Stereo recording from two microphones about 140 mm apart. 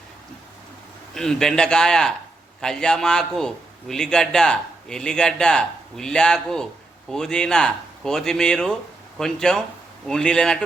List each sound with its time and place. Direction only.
1.1 s a man's voice: 5° left (ahead or behind)